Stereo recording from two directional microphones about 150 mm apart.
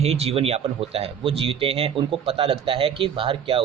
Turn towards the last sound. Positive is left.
turn(degrees=-35)  # may be behind; listen again after turning